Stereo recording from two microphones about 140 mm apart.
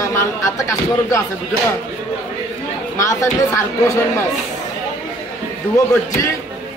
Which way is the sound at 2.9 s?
20° left (ahead or behind).